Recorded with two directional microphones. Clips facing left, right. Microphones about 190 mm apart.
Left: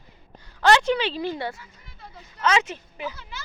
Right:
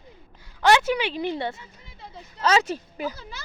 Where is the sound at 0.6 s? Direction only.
10° right (ahead or behind).